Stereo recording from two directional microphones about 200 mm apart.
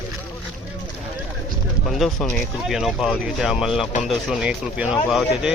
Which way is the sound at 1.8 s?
Centre (ahead or behind).